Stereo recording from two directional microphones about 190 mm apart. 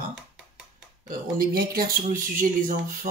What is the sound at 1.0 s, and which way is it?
Speech, 50° right (ahead or behind).